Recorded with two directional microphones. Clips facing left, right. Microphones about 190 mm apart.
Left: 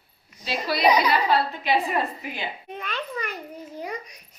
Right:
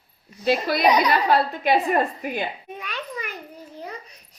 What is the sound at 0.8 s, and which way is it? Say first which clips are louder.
Speech: left 1 dB; centre (ahead or behind).